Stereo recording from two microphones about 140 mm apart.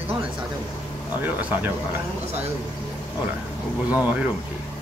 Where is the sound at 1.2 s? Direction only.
15° right (ahead or behind).